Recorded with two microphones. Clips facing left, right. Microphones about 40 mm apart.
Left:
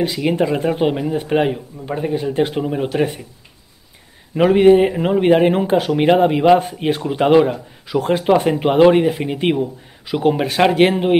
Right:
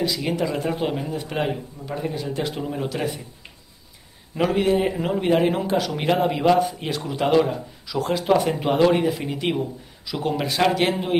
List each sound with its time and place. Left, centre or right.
0.0 s speech: left
2.6 s speech: left
2.9 s speech: left
4.5 s speech: left
4.8 s speech: left
6.6 s speech: left
10.0 s speech: left